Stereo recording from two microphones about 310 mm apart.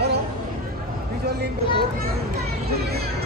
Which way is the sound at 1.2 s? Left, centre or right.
Right.